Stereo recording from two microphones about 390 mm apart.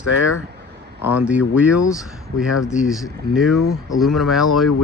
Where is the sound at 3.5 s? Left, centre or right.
Left.